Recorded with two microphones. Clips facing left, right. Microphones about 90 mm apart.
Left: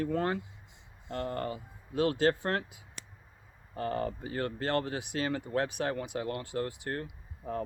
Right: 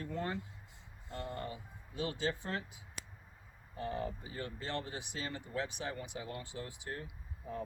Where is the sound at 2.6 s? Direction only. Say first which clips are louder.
Even; 5° left (ahead or behind).